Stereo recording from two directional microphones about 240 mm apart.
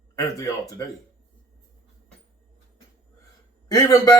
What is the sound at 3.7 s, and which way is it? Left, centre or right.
Speech, centre.